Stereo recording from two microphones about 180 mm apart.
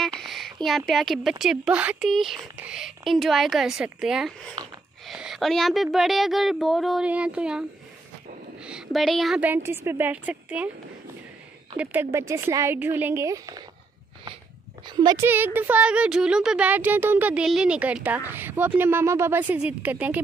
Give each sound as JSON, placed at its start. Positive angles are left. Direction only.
{"t": 0.0, "sound": "a sound", "side_deg": 0}
{"t": 1.4, "sound": "speech", "side_deg": -5}
{"t": 11.7, "sound": "speech", "side_deg": -10}
{"t": 14.9, "sound": "speech", "side_deg": -25}
{"t": 15.2, "sound": "speech", "side_deg": -10}